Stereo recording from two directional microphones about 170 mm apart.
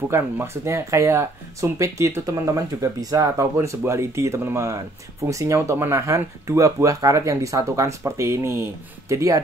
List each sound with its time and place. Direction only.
0.1 s speech: 15° right (ahead or behind)